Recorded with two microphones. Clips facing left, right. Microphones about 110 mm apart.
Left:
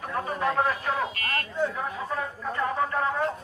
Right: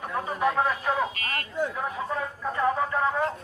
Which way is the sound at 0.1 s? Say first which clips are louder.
Right 1 dB; 10° right (ahead or behind).